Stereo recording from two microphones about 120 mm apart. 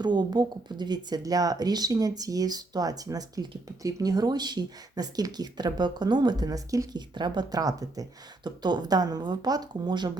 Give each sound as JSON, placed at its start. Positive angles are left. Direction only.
{"t": 0.0, "sound": "speech", "side_deg": -35}